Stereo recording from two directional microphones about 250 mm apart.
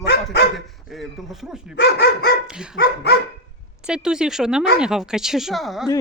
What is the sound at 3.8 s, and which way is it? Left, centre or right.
Speech, centre.